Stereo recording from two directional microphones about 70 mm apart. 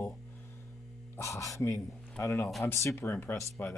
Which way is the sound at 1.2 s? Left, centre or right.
Left.